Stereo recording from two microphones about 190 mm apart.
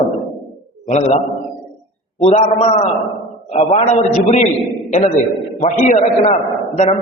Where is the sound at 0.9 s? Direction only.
40° left (ahead or behind).